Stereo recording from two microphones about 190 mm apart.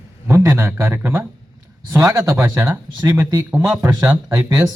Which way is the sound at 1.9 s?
15° right (ahead or behind).